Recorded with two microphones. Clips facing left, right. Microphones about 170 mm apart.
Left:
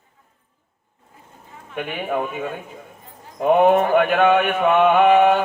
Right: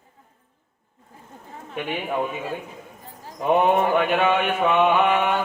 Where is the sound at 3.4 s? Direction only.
55° left (ahead or behind).